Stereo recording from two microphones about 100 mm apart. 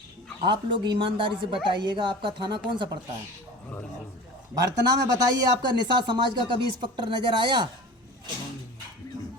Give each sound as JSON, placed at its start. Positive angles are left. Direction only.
{"t": 0.4, "sound": "speech", "side_deg": -50}
{"t": 4.5, "sound": "speech", "side_deg": -40}